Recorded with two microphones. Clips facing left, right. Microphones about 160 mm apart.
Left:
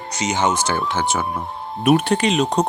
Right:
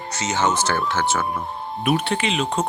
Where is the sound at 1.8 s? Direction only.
45° left (ahead or behind).